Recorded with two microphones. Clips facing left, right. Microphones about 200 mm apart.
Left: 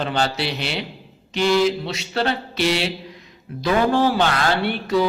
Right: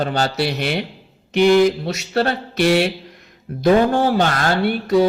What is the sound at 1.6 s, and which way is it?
Mantra, 45° right (ahead or behind).